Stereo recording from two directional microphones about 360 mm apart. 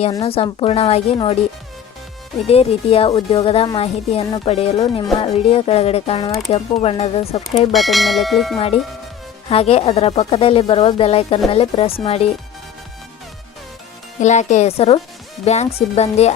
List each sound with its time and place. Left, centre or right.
0.0 s a woman's voice: centre
2.5 s a woman's voice: centre
7.7 s church bell: centre
8.5 s a woman's voice: centre
14.2 s a woman's voice: centre